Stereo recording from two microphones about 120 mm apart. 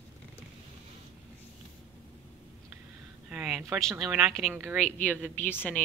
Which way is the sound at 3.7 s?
Centre (ahead or behind).